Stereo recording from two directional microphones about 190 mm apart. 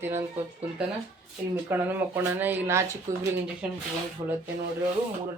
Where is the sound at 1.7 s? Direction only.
10° right (ahead or behind).